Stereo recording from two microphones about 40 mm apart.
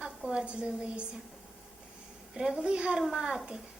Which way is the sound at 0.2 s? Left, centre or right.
Right.